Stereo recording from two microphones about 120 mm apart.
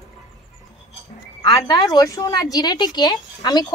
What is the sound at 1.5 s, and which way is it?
Speech, 30° left (ahead or behind).